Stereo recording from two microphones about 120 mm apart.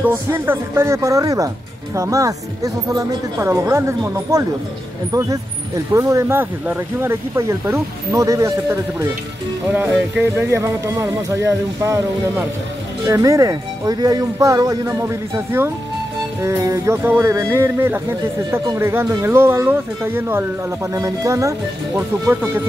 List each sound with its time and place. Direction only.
0.0 s speech: 20° right (ahead or behind)
5.9 s speech: 25° right (ahead or behind)